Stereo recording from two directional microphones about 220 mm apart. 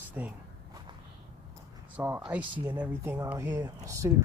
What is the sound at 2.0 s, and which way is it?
Speech, 10° right (ahead or behind).